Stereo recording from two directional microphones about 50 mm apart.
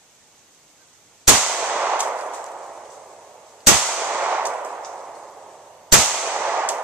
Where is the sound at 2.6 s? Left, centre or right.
Centre.